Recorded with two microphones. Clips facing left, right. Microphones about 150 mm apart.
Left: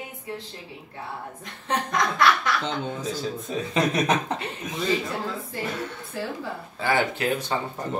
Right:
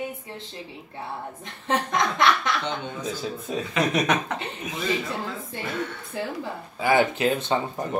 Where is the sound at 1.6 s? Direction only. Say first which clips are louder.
Right 1 dB; 25° right (ahead or behind).